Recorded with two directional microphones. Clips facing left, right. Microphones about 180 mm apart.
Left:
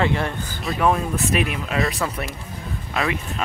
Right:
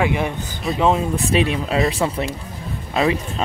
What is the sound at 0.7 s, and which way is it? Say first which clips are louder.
Speech: right 2 dB; 20° right (ahead or behind).